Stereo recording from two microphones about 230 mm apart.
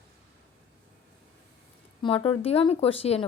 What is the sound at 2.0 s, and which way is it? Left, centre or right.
Speech, left.